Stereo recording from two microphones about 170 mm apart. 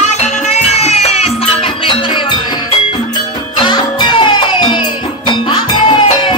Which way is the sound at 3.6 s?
30° left (ahead or behind).